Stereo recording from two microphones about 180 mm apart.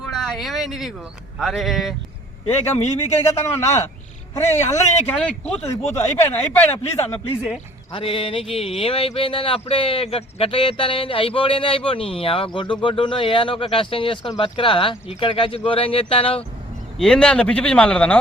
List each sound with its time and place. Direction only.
0.1 s speech: centre (ahead or behind)
3.2 s speech: 15° left (ahead or behind)
7.9 s speech: 30° left (ahead or behind)
17.0 s speech: 5° left (ahead or behind)